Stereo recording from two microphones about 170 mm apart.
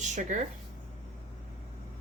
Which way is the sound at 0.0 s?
45° right (ahead or behind).